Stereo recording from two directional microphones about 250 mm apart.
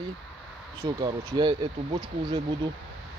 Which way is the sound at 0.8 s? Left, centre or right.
Centre.